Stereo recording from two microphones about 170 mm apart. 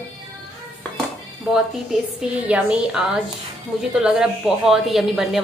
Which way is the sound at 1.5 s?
5° right (ahead or behind).